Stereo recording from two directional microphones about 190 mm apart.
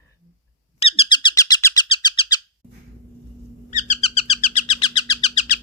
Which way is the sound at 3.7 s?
40° left (ahead or behind).